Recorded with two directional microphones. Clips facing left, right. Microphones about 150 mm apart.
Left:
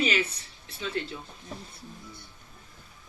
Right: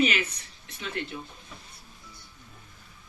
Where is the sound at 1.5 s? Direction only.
40° left (ahead or behind).